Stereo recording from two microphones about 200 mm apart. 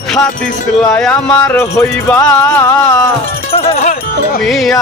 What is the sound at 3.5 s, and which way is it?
Speech, 30° left (ahead or behind).